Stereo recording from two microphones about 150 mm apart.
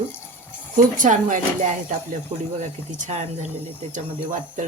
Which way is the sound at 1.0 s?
60° right (ahead or behind).